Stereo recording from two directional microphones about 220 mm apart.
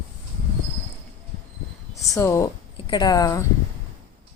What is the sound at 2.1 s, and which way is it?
A woman's voice, 15° left (ahead or behind).